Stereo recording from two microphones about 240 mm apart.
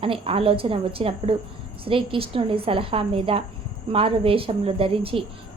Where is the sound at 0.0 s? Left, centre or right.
Right.